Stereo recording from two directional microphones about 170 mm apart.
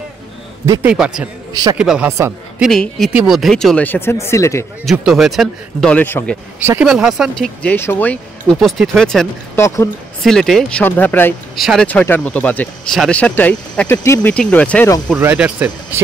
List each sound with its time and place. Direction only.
0.8 s speech: 5° right (ahead or behind)
1.5 s a man's voice: 20° right (ahead or behind)
1.8 s speech: 5° right (ahead or behind); by 4.6 s 15° left (ahead or behind)
4.8 s speech: centre (ahead or behind)
6.6 s speech: 10° right (ahead or behind); by 9.3 s 5° left (ahead or behind)
9.6 s speech: 20° left (ahead or behind)
10.2 s speech: centre (ahead or behind)
11.5 s speech: centre (ahead or behind)
15.1 s speech: 10° right (ahead or behind)